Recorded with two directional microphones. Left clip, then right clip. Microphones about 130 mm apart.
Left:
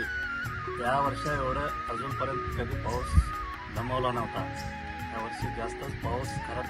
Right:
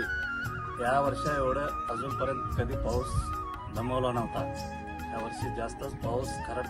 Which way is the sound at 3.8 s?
25° left (ahead or behind).